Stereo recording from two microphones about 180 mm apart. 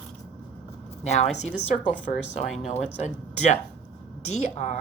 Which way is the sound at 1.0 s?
40° left (ahead or behind).